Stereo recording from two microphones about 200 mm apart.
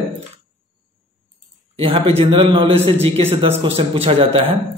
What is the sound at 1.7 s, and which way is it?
A man's voice, 25° right (ahead or behind).